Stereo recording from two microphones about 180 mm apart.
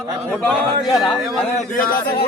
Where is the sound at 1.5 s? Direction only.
50° left (ahead or behind).